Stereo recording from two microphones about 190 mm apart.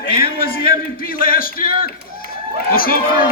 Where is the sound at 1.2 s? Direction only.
50° left (ahead or behind).